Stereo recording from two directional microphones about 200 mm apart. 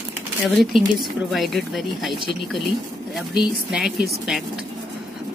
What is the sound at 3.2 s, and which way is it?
Speech, 5° right (ahead or behind).